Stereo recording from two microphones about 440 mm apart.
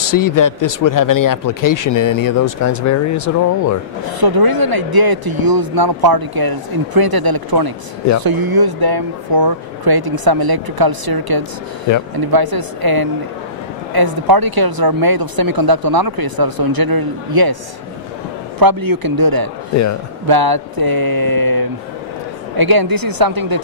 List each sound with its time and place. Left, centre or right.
0.0 s speech: left
4.0 s speech: right
18.6 s speech: right